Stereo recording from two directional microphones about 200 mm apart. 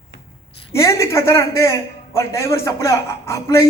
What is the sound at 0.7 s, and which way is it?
A man's voice, 15° left (ahead or behind).